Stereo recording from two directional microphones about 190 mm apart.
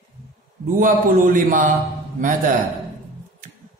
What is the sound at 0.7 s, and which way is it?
Speech, 45° right (ahead or behind).